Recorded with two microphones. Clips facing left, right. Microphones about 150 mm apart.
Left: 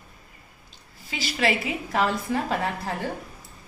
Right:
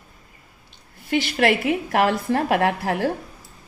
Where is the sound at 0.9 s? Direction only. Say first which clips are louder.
Right 9 dB; 60° right (ahead or behind); by 3.1 s 75° right (ahead or behind).